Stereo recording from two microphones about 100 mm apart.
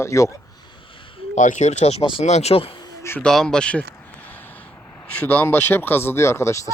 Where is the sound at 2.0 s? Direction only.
75° left (ahead or behind).